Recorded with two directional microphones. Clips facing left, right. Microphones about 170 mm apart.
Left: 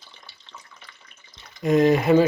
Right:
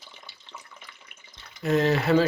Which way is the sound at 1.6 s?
15° left (ahead or behind).